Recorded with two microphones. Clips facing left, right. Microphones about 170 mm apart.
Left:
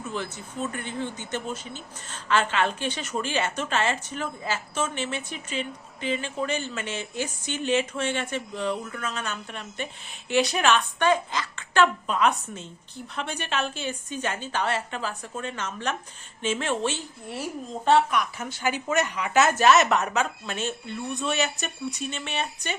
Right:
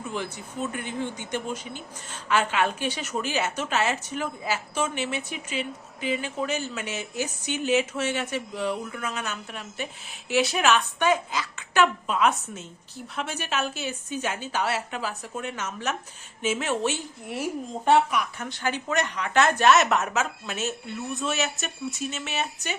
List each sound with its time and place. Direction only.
0.1 s speech: 10° right (ahead or behind)
18.2 s a woman's voice: 5° left (ahead or behind)